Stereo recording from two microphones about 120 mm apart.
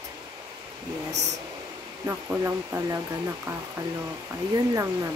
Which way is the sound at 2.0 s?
20° right (ahead or behind).